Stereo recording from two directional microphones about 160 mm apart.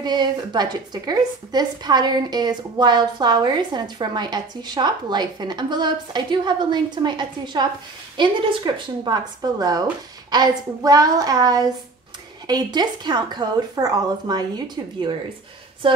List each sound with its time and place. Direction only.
0.0 s a woman's voice: 25° right (ahead or behind)